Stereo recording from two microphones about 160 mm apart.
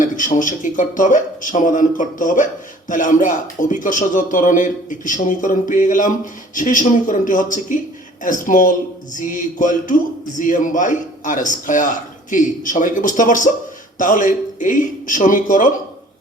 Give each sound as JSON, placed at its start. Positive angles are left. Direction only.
{"t": 0.0, "sound": "a man's voice", "side_deg": 55}